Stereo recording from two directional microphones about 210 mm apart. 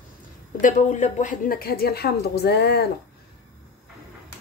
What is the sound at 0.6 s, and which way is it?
A woman's voice, 35° left (ahead or behind).